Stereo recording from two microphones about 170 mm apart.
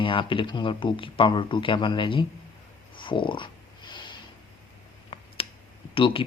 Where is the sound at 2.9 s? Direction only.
30° left (ahead or behind).